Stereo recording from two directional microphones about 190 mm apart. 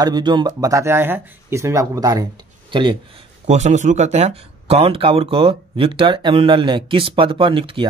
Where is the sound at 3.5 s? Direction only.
40° right (ahead or behind).